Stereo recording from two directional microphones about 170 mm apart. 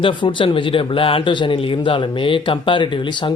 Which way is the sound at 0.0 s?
30° left (ahead or behind).